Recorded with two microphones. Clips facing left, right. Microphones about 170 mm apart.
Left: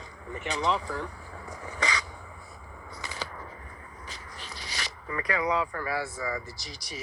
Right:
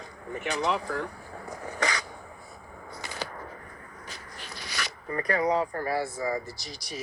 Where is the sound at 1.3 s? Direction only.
40° right (ahead or behind).